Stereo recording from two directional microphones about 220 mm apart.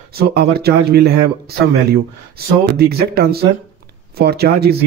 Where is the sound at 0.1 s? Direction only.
45° right (ahead or behind).